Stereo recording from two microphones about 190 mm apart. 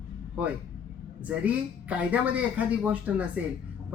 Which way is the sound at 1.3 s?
10° right (ahead or behind).